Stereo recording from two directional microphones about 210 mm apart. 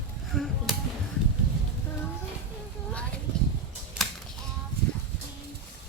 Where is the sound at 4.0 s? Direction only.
Centre (ahead or behind).